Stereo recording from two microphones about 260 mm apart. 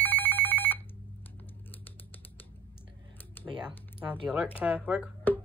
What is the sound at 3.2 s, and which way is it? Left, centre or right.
Computer keyboard, centre.